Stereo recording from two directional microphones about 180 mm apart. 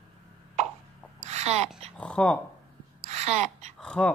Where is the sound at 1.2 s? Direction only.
40° right (ahead or behind).